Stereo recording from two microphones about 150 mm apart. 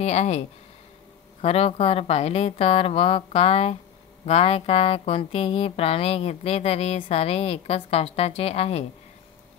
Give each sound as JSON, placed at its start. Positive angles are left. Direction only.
{"t": 0.0, "sound": "speech", "side_deg": 45}